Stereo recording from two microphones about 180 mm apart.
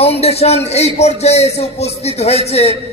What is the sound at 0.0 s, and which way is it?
A man's voice, 35° left (ahead or behind).